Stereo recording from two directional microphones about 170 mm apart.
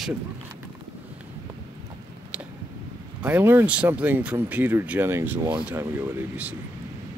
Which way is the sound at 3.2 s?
10° right (ahead or behind).